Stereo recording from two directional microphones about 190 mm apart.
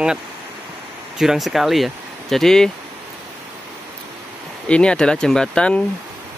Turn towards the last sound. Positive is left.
turn(degrees=5)  # may be behind; listen again after turning